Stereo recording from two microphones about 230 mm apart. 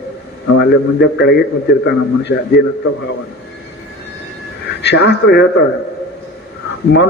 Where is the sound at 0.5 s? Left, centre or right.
Left.